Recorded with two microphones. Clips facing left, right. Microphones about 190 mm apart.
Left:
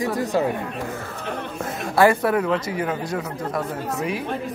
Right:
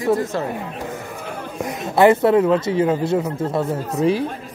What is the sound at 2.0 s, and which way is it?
Speech, 25° right (ahead or behind).